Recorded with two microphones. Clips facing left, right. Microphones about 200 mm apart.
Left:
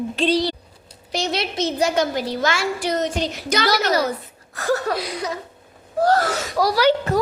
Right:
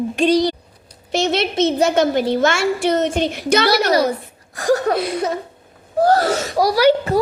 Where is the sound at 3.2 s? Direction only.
55° right (ahead or behind).